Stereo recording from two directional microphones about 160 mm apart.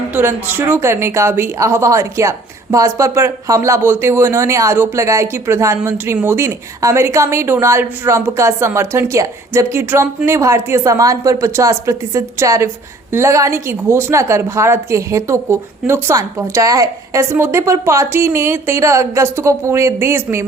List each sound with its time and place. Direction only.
0.1 s speech: 15° right (ahead or behind)